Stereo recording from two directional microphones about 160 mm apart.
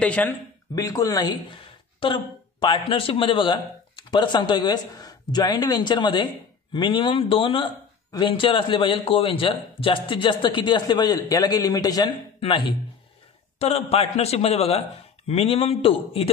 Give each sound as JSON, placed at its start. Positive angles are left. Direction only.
{"t": 0.0, "sound": "speech", "side_deg": 10}
{"t": 0.7, "sound": "a woman's voice", "side_deg": 20}